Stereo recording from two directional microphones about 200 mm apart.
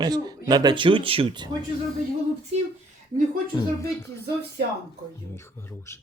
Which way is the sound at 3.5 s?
20° left (ahead or behind).